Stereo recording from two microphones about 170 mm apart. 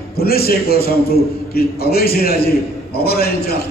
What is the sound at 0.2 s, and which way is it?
A man's voice, 65° left (ahead or behind).